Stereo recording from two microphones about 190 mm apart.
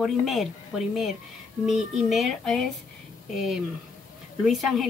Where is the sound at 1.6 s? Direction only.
Centre (ahead or behind).